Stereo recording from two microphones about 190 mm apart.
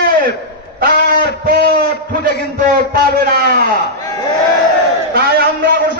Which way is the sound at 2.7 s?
55° right (ahead or behind).